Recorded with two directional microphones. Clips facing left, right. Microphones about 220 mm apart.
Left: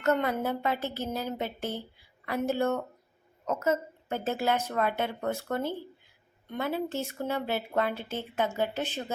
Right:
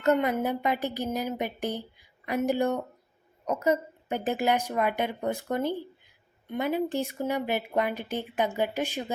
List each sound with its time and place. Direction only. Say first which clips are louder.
0.0 s speech: right 3 dB; 15° right (ahead or behind)